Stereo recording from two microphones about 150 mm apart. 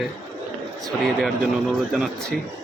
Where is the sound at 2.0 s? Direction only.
5° left (ahead or behind).